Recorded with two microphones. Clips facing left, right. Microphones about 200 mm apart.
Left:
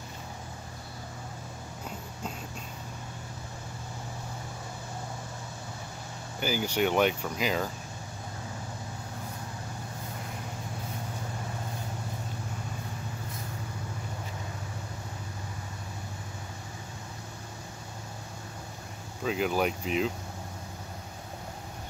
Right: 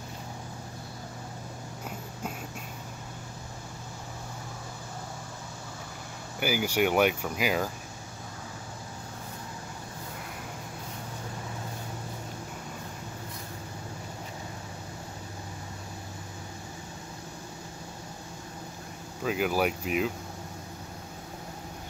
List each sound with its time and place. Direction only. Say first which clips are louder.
6.4 s speech: right 1 dB; 10° right (ahead or behind)
19.2 s speech: right 1 dB; 5° right (ahead or behind)